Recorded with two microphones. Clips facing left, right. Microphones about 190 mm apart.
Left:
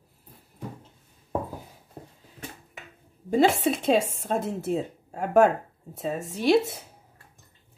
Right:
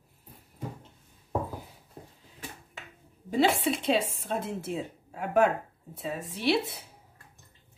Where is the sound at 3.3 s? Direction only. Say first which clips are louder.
Left 4 dB; 45° left (ahead or behind).